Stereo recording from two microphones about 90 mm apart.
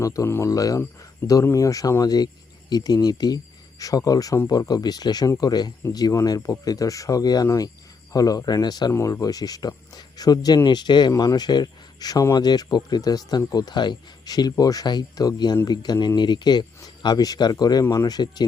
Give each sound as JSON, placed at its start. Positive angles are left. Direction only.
{"t": 0.0, "sound": "speech", "side_deg": 35}
{"t": 1.2, "sound": "speech", "side_deg": 30}
{"t": 8.9, "sound": "speech", "side_deg": 30}